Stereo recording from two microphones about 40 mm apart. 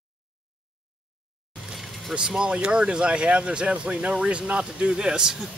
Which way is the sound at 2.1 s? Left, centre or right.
Right.